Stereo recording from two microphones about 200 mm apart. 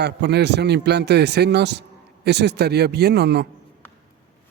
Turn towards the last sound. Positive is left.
turn(degrees=-55)  # may be behind; listen again after turning